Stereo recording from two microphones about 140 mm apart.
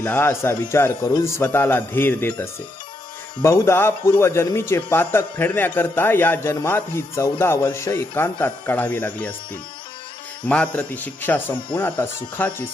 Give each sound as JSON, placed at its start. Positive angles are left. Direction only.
{"t": 0.0, "sound": "speech", "side_deg": 15}
{"t": 10.4, "sound": "speech", "side_deg": 10}